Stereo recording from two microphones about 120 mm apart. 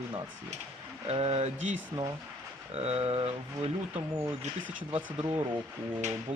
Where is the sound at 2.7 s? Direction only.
60° right (ahead or behind).